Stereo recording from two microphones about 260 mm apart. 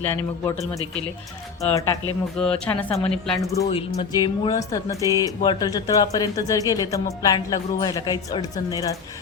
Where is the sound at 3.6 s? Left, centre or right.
Left.